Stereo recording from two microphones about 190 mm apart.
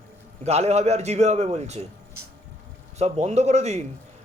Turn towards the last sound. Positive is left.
turn(degrees=-35)  # may be behind; listen again after turning